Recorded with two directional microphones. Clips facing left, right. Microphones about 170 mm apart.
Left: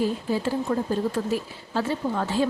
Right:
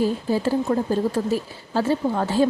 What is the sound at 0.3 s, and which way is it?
Speech, 35° right (ahead or behind).